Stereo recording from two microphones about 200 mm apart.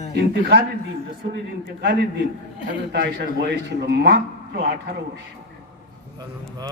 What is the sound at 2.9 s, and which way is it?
A man's voice, 55° right (ahead or behind).